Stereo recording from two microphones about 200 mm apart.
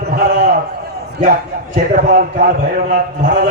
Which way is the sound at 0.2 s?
45° right (ahead or behind).